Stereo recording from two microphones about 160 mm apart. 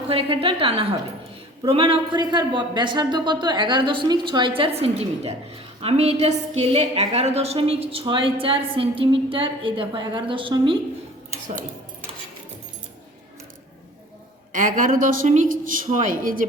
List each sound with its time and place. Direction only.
0.1 s speech: 35° right (ahead or behind)
14.5 s a woman's voice: 55° right (ahead or behind)